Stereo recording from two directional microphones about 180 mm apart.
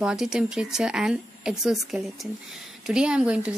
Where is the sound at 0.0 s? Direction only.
5° right (ahead or behind).